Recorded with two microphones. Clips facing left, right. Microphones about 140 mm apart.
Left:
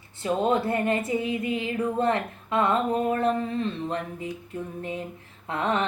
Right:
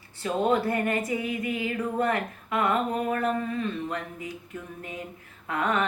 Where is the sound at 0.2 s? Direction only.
25° left (ahead or behind).